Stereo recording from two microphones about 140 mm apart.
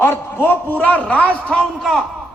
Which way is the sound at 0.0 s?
15° left (ahead or behind).